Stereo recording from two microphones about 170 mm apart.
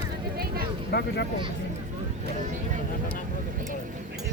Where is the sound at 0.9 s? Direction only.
75° left (ahead or behind).